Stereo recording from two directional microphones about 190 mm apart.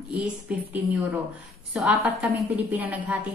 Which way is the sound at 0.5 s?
5° right (ahead or behind).